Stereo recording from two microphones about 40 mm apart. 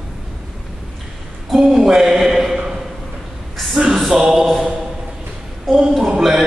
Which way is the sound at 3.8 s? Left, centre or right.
Right.